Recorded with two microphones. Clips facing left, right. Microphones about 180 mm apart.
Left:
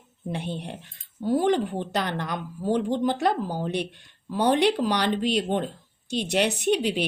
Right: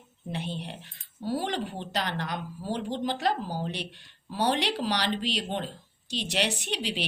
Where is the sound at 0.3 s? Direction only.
55° left (ahead or behind).